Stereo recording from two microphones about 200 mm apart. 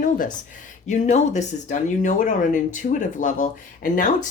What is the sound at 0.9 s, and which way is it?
Speech, 35° left (ahead or behind).